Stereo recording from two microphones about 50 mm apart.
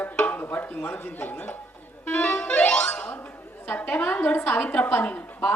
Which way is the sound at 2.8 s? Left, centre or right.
Left.